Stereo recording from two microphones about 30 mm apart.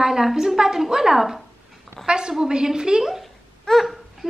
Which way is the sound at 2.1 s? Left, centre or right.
Right.